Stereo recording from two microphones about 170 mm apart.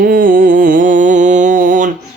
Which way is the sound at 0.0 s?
55° right (ahead or behind).